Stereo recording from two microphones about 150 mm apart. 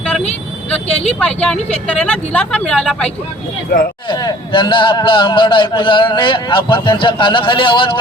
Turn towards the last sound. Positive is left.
turn(degrees=35)  # may be behind; listen again after turning